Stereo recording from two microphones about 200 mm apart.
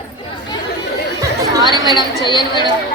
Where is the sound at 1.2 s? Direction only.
20° right (ahead or behind).